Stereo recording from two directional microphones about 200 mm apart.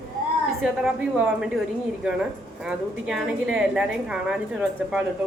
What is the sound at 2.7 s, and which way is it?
A woman's voice, 5° right (ahead or behind).